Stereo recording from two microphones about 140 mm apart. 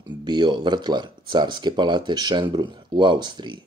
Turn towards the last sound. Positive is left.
turn(degrees=-35)  # may be behind; listen again after turning